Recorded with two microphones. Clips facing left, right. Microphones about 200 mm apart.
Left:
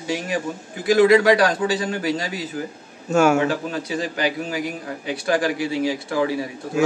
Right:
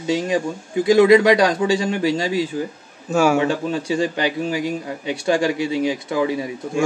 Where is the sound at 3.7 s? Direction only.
25° right (ahead or behind).